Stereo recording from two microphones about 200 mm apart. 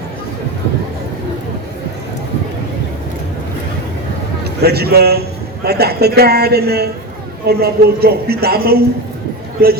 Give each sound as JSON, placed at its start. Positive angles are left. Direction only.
{"t": 4.6, "sound": "a man's voice", "side_deg": -50}